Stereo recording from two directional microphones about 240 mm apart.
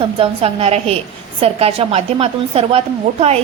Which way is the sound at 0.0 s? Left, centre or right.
Right.